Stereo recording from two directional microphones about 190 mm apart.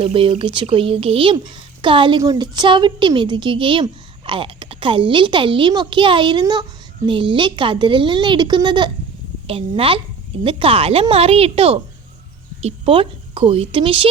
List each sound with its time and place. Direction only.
0.0 s a child's voice: 30° right (ahead or behind)